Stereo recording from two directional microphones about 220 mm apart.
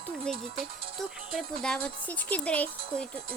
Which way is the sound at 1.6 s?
5° left (ahead or behind).